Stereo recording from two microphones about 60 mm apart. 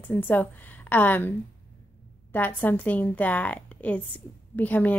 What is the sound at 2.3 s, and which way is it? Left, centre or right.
A woman's voice, left.